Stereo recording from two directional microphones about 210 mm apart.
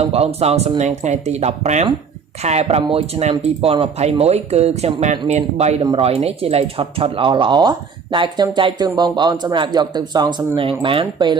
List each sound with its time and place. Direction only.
0.0 s speech: 30° right (ahead or behind)